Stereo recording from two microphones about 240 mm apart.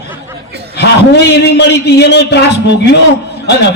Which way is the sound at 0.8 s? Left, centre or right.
Left.